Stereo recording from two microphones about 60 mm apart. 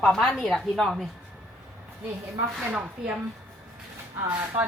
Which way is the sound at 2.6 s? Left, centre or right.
Centre.